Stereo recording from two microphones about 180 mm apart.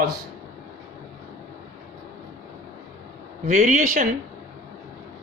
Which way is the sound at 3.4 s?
45° right (ahead or behind).